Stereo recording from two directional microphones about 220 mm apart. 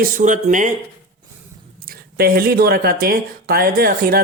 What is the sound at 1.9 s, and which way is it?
Speech, 45° right (ahead or behind).